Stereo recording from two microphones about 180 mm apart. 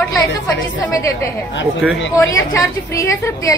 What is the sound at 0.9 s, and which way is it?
Speech, 15° left (ahead or behind).